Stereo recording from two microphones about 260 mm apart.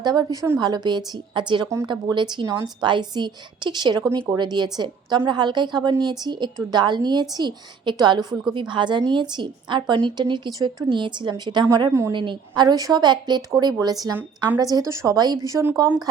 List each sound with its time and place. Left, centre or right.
0.0 s a woman's voice: centre